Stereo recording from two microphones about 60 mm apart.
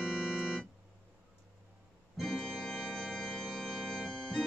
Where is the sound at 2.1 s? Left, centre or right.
Centre.